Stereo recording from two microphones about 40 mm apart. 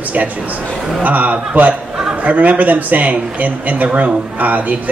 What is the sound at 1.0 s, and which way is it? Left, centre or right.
A man's voice, right.